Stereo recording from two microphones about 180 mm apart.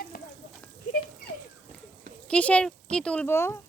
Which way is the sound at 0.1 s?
50° left (ahead or behind).